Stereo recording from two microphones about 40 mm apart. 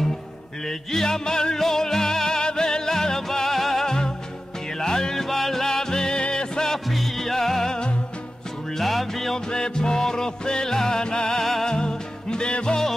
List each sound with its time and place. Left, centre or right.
0.7 s music: centre
6.9 s music: centre
9.5 s music: centre
11.7 s music: centre